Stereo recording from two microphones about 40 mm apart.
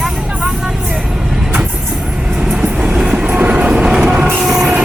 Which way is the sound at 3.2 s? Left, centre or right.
Right.